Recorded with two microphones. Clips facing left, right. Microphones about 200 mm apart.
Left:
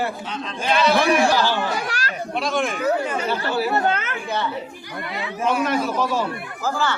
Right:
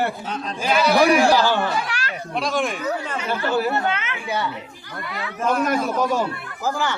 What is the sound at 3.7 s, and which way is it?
Speech, 40° left (ahead or behind).